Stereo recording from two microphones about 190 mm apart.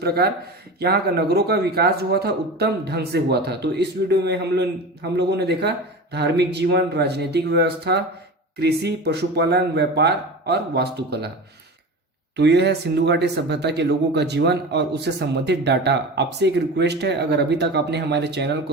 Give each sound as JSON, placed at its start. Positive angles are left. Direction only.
{"t": 0.0, "sound": "speech", "side_deg": -55}
{"t": 12.4, "sound": "speech", "side_deg": -65}